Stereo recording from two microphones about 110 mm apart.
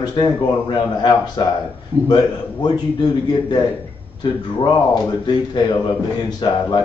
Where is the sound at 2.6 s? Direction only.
40° left (ahead or behind).